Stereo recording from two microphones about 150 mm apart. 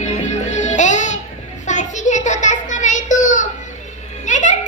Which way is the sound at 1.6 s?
55° left (ahead or behind).